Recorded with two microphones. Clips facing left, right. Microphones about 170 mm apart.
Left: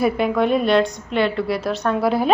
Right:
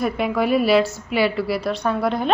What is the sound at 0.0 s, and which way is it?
A woman's voice, centre (ahead or behind).